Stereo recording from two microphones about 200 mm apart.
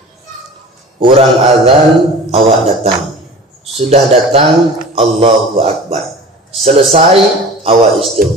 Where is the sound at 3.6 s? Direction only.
30° right (ahead or behind).